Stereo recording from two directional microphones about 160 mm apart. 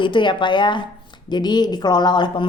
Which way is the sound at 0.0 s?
30° left (ahead or behind).